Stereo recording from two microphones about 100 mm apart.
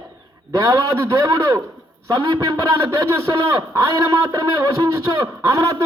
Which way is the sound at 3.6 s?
30° right (ahead or behind).